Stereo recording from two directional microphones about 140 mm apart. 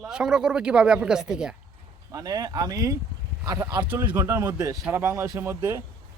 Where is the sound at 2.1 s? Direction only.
25° right (ahead or behind).